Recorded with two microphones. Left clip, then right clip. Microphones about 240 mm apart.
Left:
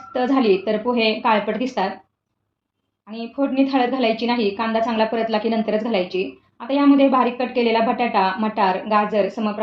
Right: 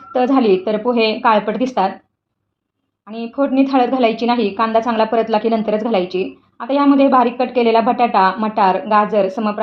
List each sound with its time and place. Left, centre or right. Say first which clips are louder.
0.1 s a woman's voice: right 4 dB; right
3.1 s a woman's voice: right 5 dB; right